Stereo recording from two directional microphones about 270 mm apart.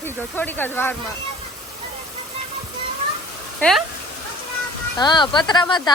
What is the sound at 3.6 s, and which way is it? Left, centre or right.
Speech, centre.